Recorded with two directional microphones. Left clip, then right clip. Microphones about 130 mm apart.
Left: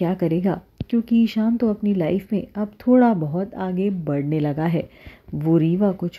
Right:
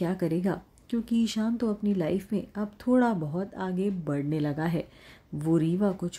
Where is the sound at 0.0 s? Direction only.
20° left (ahead or behind).